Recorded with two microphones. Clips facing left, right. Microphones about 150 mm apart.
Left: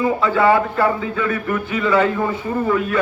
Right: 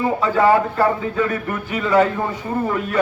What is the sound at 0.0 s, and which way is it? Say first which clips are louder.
A man's voice: even; 40° right (ahead or behind).